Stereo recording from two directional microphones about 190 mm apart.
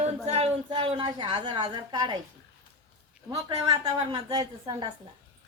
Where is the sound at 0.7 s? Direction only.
25° right (ahead or behind).